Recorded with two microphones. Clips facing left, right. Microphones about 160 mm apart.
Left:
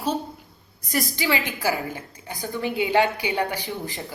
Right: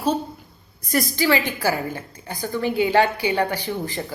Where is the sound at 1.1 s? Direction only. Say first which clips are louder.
Right 5 dB; 15° left (ahead or behind).